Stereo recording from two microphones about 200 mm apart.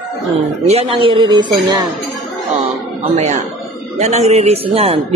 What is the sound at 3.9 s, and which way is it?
A woman's voice, 35° right (ahead or behind).